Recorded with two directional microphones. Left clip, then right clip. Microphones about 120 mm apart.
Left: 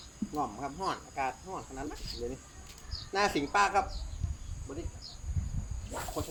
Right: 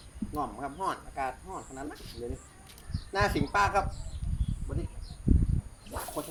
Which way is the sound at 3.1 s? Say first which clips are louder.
Right 1 dB; 5° right (ahead or behind).